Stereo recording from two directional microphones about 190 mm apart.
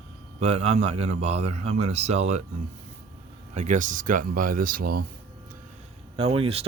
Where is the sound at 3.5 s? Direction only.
40° right (ahead or behind).